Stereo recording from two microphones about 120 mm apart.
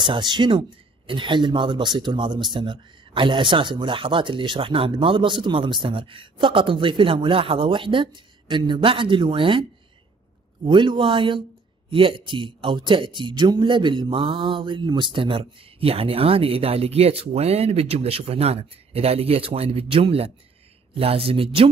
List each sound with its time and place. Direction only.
0.0 s speech: 40° right (ahead or behind)